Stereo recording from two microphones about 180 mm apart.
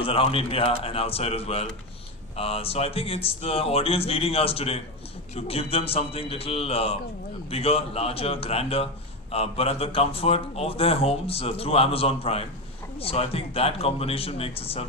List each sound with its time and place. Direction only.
0.0 s speech: 30° left (ahead or behind)